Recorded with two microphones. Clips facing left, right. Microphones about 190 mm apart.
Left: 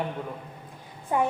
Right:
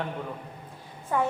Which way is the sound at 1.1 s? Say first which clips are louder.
Left 2 dB; 20° left (ahead or behind).